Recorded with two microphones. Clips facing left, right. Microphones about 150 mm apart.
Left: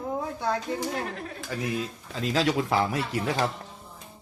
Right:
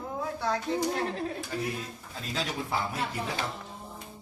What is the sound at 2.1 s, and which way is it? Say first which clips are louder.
Speech: left 10 dB; 90° left.